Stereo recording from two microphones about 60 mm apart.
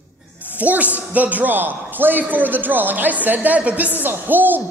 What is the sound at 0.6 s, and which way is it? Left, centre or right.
A man's voice, right.